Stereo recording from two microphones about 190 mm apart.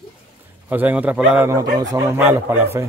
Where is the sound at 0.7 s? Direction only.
10° right (ahead or behind).